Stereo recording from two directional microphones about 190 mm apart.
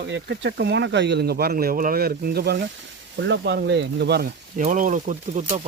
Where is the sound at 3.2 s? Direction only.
70° right (ahead or behind).